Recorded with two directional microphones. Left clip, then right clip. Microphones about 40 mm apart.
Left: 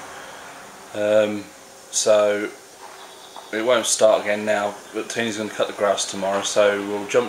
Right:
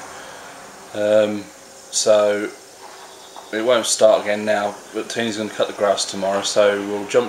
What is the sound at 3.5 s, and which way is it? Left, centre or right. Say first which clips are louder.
Speech: right 2 dB; centre.